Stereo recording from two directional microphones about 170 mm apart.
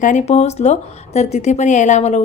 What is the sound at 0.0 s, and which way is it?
A woman's voice, 45° left (ahead or behind).